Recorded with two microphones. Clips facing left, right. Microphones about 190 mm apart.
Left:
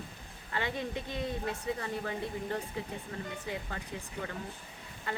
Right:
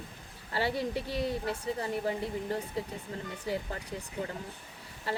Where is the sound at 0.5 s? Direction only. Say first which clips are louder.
Right 4 dB; 35° right (ahead or behind).